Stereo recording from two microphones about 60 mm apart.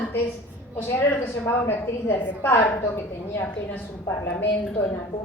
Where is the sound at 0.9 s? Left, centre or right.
Left.